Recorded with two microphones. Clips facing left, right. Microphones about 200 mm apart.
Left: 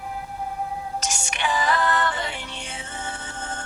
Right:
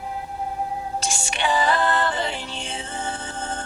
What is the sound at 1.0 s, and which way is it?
Music, 30° right (ahead or behind).